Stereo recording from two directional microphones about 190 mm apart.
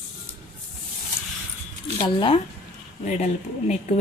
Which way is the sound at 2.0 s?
25° left (ahead or behind).